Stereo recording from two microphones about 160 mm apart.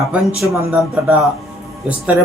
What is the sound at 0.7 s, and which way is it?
Speech, centre (ahead or behind).